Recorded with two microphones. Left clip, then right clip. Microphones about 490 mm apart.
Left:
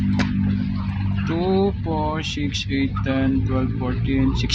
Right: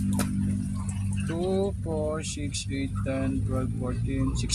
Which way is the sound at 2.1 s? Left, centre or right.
Right.